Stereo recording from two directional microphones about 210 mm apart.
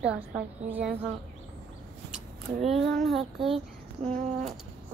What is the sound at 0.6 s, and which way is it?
Speech, 10° right (ahead or behind).